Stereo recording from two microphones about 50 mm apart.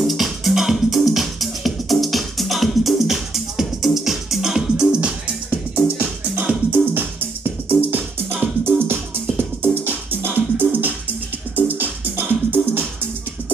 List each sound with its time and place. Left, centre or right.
0.0 s music: centre
5.9 s music: right